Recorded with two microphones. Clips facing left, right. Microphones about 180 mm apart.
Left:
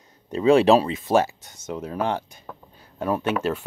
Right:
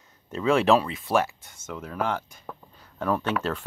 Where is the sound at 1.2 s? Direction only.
40° left (ahead or behind).